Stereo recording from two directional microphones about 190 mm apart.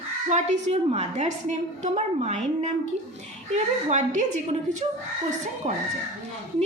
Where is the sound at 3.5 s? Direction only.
40° right (ahead or behind).